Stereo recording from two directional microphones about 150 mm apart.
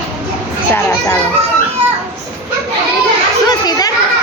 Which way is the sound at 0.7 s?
15° left (ahead or behind).